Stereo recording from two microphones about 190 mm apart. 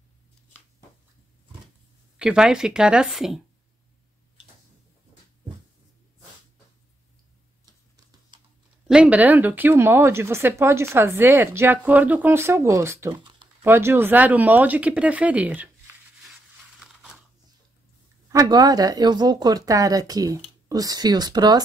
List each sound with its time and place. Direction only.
2.1 s speech: 5° right (ahead or behind)
8.8 s speech: 5° right (ahead or behind)
18.3 s speech: 20° right (ahead or behind)